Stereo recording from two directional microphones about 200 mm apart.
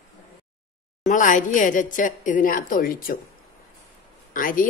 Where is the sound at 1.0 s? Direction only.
40° left (ahead or behind).